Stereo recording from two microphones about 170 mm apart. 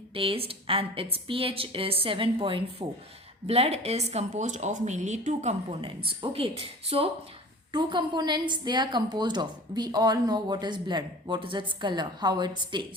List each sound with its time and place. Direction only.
0.1 s a woman's voice: 35° right (ahead or behind)